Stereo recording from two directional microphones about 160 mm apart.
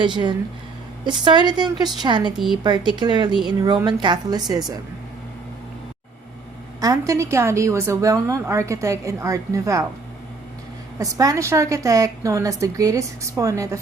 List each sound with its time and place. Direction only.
0.0 s a woman's voice: 30° right (ahead or behind)
6.7 s a woman's voice: 20° right (ahead or behind)
10.9 s a woman's voice: 20° right (ahead or behind)